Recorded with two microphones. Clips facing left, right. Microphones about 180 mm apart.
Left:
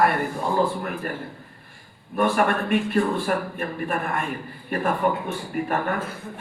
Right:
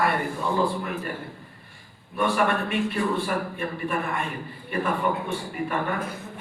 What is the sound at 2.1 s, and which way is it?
A man's voice, 50° left (ahead or behind).